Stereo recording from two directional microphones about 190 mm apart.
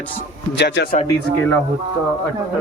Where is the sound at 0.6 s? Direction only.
65° left (ahead or behind).